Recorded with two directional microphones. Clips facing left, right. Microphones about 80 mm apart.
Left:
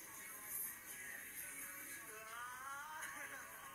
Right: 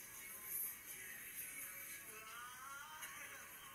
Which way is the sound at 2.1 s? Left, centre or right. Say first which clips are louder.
Left 4 dB; left.